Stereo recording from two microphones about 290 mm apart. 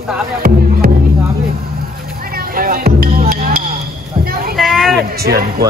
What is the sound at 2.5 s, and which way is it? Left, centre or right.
Music, right.